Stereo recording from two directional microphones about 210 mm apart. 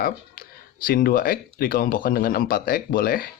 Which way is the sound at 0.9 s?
40° left (ahead or behind).